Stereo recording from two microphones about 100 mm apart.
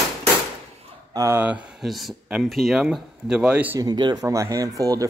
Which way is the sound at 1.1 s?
30° right (ahead or behind).